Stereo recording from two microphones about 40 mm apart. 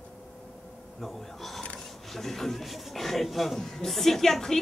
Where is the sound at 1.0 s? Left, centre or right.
Centre.